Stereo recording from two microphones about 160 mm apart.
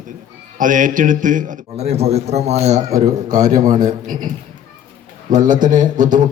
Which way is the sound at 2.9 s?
20° right (ahead or behind).